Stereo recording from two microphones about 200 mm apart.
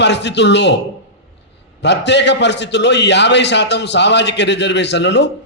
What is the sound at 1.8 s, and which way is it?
A man's voice, 60° left (ahead or behind).